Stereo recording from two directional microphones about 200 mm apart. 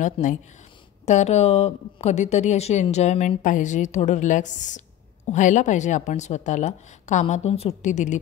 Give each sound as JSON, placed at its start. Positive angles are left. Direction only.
{"t": 0.0, "sound": "a woman's voice", "side_deg": 40}